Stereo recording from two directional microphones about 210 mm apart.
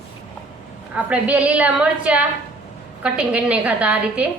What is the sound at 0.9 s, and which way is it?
A woman's voice, 5° right (ahead or behind).